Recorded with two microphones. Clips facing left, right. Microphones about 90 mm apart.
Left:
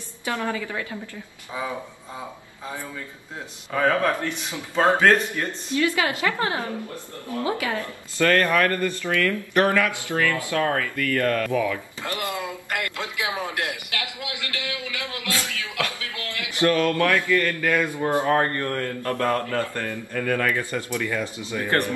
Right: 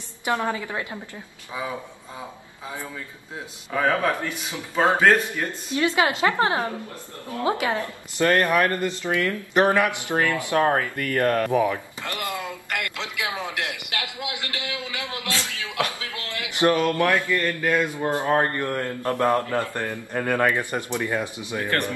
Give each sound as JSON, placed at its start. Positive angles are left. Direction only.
{"t": 0.2, "sound": "a woman's voice", "side_deg": -20}
{"t": 3.7, "sound": "a man's voice", "side_deg": -10}
{"t": 12.0, "sound": "a sound", "side_deg": 15}
{"t": 12.9, "sound": "a man's voice", "side_deg": 15}
{"t": 13.9, "sound": "a sound", "side_deg": -20}
{"t": 17.3, "sound": "a woman's voice", "side_deg": -20}